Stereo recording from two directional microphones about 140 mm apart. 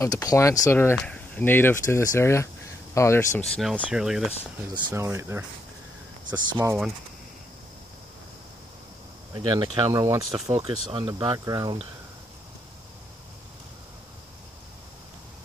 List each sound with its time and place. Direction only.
0.0 s speech: 25° left (ahead or behind)
3.3 s speech: 5° left (ahead or behind)
3.7 s speech: 5° right (ahead or behind)
4.9 s speech: 20° right (ahead or behind)
9.3 s speech: 35° right (ahead or behind)
9.9 s speech: 25° right (ahead or behind)
10.4 s speech: 55° right (ahead or behind)
10.9 s speech: 35° right (ahead or behind)
11.1 s speech: 25° right (ahead or behind)